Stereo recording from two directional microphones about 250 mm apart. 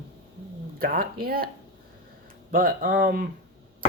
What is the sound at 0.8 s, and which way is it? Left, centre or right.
Speech, right.